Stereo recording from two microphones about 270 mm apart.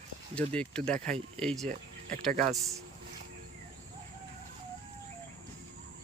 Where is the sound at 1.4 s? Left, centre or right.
Centre.